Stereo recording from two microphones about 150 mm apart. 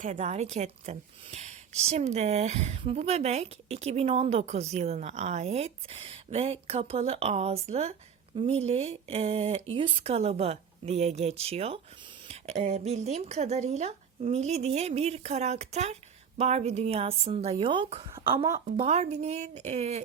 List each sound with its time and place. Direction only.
0.0 s a woman's voice: 50° right (ahead or behind)